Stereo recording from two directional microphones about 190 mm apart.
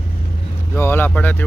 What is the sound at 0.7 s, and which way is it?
Speech, 10° left (ahead or behind).